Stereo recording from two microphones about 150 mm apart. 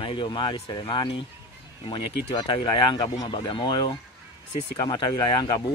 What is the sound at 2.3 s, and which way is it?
Speech, 30° left (ahead or behind).